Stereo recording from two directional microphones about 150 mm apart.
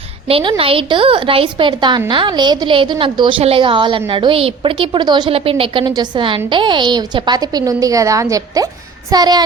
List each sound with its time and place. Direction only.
0.3 s a woman's voice: 40° right (ahead or behind); by 8.6 s 20° right (ahead or behind)
9.1 s child singing: 25° right (ahead or behind)